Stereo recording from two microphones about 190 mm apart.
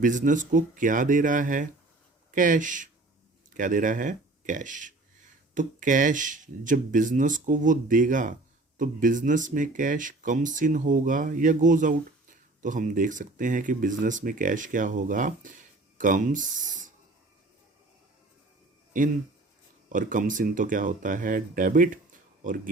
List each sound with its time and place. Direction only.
0.0 s speech: 40° right (ahead or behind)
19.9 s speech: 45° right (ahead or behind)